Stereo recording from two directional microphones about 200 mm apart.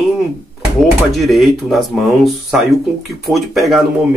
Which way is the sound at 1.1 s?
Centre (ahead or behind).